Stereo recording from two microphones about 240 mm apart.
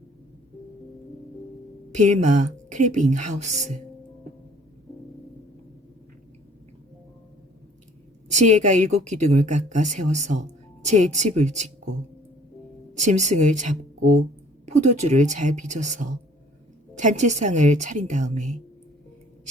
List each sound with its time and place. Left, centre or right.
1.9 s speech: right
8.3 s speech: right
12.9 s a woman's voice: right